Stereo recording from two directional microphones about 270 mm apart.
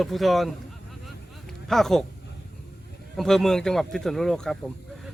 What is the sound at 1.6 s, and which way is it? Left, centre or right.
Speech, centre.